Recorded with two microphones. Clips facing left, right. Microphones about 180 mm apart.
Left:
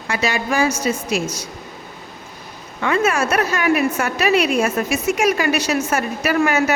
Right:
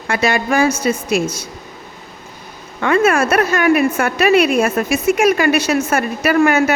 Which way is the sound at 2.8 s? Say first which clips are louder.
Right 4 dB; 55° right (ahead or behind).